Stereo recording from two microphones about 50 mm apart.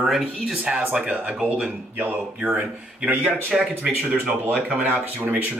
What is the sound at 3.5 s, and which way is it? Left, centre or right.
Speech, centre.